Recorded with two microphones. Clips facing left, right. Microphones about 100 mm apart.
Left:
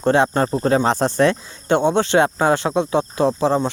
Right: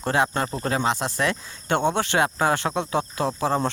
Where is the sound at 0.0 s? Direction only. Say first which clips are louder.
Left 7 dB; 25° left (ahead or behind).